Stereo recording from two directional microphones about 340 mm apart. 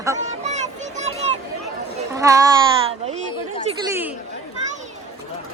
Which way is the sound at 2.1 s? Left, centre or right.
Centre.